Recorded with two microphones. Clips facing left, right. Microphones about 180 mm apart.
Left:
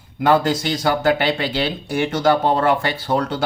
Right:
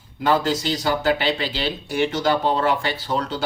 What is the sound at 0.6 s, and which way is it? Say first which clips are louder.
Speech: left 3 dB; 55° left (ahead or behind).